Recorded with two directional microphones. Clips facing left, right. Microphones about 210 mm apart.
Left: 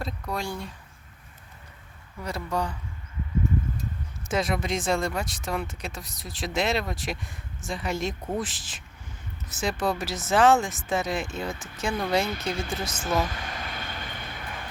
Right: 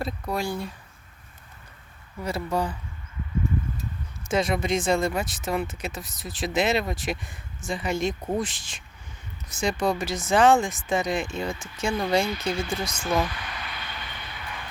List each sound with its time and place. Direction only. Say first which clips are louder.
0.0 s speech: right 3 dB; 5° right (ahead or behind)
2.2 s speech: right 3 dB; 5° right (ahead or behind)
4.3 s speech: right 3 dB; centre (ahead or behind)
13.2 s a sound: even; 45° left (ahead or behind)